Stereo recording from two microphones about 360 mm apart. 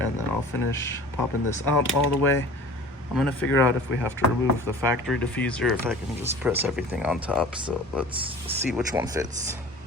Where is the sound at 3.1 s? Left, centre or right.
Centre.